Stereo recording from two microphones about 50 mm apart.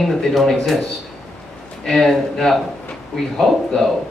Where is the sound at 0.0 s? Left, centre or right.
Centre.